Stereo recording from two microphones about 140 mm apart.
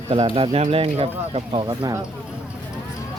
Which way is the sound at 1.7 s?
25° right (ahead or behind).